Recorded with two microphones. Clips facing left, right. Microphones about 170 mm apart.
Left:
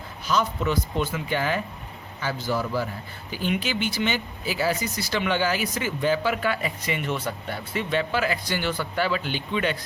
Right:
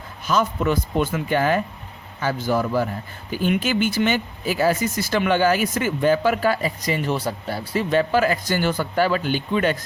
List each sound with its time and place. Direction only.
0.3 s speech: 50° right (ahead or behind)